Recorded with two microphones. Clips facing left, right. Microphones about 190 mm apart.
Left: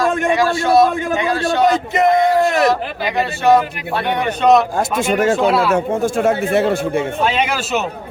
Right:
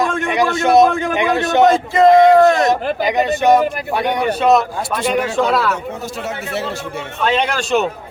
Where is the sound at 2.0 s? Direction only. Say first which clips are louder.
Right 6 dB; 20° right (ahead or behind).